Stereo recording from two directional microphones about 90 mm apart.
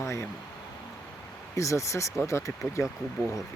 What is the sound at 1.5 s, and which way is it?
Speech, 35° left (ahead or behind).